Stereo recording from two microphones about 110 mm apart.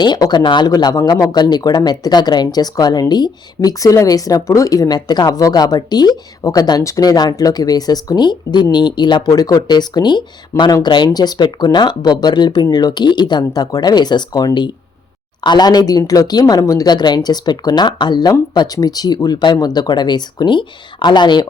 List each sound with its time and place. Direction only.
0.0 s speech: 40° left (ahead or behind)
10.5 s speech: 25° left (ahead or behind)
10.8 s speech: 45° left (ahead or behind)